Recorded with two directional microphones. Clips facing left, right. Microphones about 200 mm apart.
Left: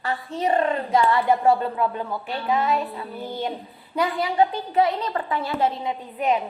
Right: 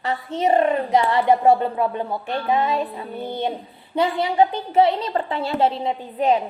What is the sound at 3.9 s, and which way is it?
A woman's voice, 25° right (ahead or behind).